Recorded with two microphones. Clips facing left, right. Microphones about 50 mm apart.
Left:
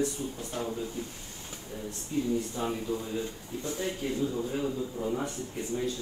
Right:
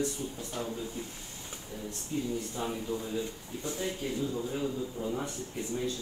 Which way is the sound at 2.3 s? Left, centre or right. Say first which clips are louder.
Left 3 dB; left.